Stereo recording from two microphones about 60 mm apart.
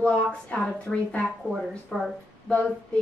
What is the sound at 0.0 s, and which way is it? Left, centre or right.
A woman's voice, centre.